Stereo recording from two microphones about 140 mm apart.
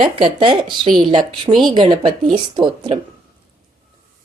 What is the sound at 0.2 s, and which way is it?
Speech, 40° right (ahead or behind).